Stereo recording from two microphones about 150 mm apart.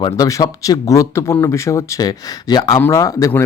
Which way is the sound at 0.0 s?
20° left (ahead or behind).